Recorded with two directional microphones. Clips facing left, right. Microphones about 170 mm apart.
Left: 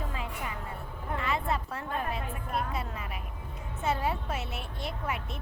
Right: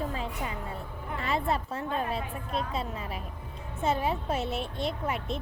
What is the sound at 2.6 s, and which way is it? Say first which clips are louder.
Speech: right 2 dB; 25° right (ahead or behind).